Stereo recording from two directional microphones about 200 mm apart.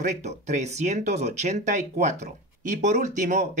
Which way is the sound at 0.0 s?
35° right (ahead or behind).